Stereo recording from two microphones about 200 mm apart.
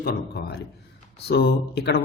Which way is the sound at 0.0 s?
50° left (ahead or behind).